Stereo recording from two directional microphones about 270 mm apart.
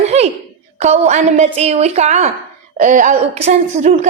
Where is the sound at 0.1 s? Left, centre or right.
Right.